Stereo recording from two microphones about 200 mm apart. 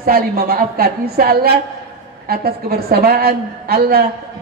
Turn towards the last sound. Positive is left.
turn(degrees=-50)  # may be behind; listen again after turning